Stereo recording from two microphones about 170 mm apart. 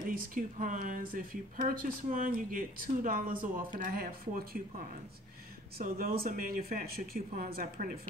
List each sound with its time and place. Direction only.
0.1 s speech: 50° right (ahead or behind)